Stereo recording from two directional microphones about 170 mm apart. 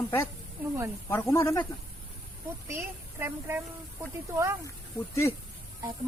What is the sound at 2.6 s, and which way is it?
A woman's voice, 15° right (ahead or behind).